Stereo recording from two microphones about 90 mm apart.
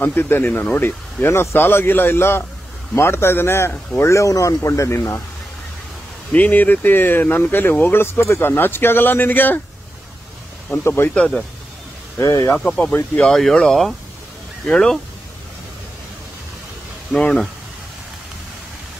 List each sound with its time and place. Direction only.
0.0 s speech: 25° left (ahead or behind)
6.3 s speech: 20° left (ahead or behind)
10.8 s speech: 25° left (ahead or behind)
11.1 s speech: 10° left (ahead or behind)
12.2 s speech: 40° left (ahead or behind)
12.5 s speech: 10° left (ahead or behind)
17.1 s speech: 10° left (ahead or behind)